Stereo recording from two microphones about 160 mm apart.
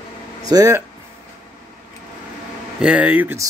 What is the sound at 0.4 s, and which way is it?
Speech, 20° right (ahead or behind).